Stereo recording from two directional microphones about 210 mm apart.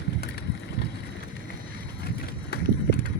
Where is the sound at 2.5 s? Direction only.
50° left (ahead or behind).